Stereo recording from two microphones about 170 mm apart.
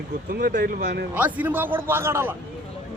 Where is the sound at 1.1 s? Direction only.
10° right (ahead or behind).